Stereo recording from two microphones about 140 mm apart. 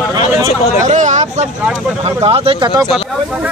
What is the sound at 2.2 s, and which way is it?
Speech, 40° right (ahead or behind).